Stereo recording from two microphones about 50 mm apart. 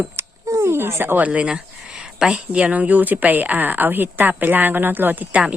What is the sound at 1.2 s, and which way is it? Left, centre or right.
A woman's voice, right.